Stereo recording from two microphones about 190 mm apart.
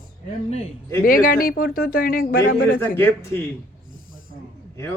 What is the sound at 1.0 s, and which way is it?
Speech, 50° left (ahead or behind).